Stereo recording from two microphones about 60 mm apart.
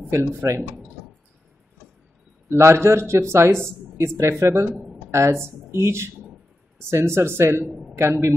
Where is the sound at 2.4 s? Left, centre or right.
Right.